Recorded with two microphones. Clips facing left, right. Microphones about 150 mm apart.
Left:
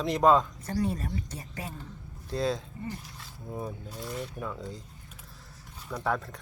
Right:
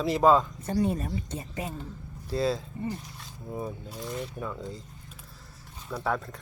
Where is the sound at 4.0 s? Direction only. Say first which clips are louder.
Right 2 dB; 20° right (ahead or behind).